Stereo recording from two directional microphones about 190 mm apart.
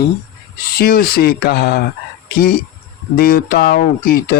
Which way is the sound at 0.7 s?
50° left (ahead or behind).